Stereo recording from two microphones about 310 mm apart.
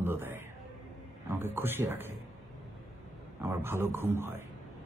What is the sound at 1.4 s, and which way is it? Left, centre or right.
Speech, centre.